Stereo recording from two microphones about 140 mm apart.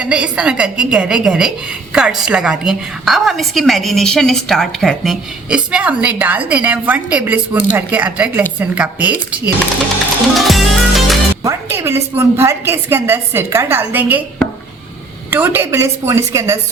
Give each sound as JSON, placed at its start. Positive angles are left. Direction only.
{"t": 0.0, "sound": "a woman's voice", "side_deg": -5}
{"t": 10.3, "sound": "music", "side_deg": 0}
{"t": 11.4, "sound": "a woman's voice", "side_deg": -20}
{"t": 15.3, "sound": "a woman's voice", "side_deg": -15}